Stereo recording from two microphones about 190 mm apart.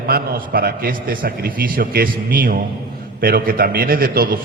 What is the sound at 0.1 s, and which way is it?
A man's voice, 50° right (ahead or behind).